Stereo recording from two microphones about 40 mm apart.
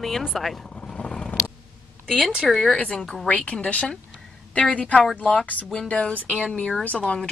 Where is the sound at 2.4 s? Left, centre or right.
Centre.